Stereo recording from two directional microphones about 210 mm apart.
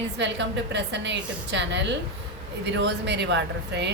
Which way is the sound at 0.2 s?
55° right (ahead or behind).